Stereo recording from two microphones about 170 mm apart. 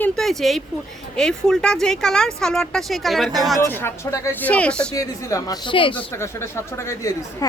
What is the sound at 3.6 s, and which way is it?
Speech, 15° left (ahead or behind).